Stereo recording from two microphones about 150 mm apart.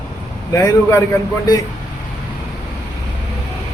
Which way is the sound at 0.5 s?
20° left (ahead or behind).